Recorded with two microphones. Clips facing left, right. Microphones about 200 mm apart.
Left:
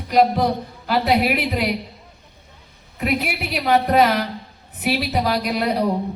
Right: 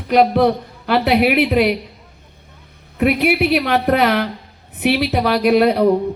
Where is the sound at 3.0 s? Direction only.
65° right (ahead or behind).